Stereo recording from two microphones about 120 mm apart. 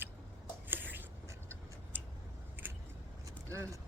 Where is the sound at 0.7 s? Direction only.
15° right (ahead or behind).